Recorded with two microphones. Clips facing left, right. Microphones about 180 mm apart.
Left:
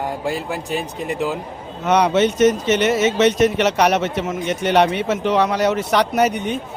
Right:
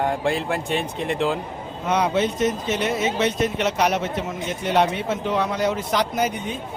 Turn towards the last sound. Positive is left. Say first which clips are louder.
# left 6 dB
turn(degrees=70)  # may be behind; listen again after turning